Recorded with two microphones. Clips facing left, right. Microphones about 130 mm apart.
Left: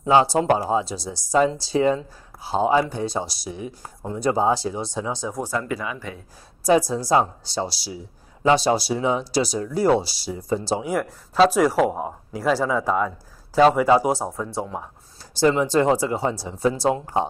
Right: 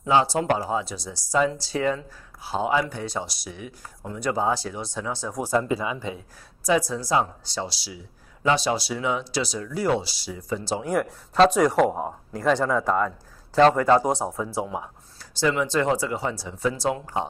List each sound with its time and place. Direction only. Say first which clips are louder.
0.0 s speech: left 4 dB; 25° left (ahead or behind)
5.4 s speech: right 6 dB; 20° right (ahead or behind)
6.6 s speech: left 4 dB; 30° left (ahead or behind)
10.8 s speech: even; centre (ahead or behind)
15.4 s speech: left 4 dB; 35° left (ahead or behind)